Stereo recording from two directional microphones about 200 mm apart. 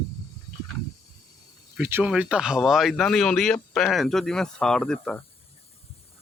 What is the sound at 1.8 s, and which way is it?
Speech, 10° right (ahead or behind).